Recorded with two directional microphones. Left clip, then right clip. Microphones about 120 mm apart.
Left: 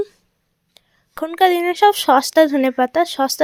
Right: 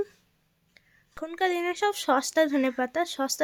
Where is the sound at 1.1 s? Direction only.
50° left (ahead or behind).